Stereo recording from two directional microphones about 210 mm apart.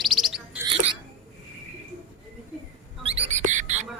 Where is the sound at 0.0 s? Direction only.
Centre (ahead or behind).